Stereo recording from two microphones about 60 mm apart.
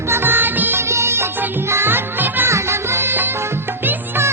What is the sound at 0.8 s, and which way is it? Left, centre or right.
Music of bollywood, right.